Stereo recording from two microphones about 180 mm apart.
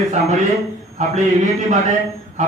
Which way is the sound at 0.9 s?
40° right (ahead or behind).